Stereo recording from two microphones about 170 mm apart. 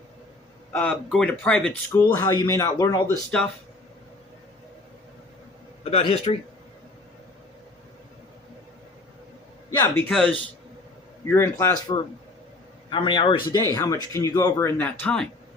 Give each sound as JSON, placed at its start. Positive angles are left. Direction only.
{"t": 0.7, "sound": "speech", "side_deg": 10}
{"t": 2.0, "sound": "speech", "side_deg": 15}
{"t": 5.8, "sound": "a man's voice", "side_deg": 35}
{"t": 9.7, "sound": "a man's voice", "side_deg": 20}
{"t": 10.1, "sound": "speech", "side_deg": 5}
{"t": 13.7, "sound": "speech", "side_deg": 20}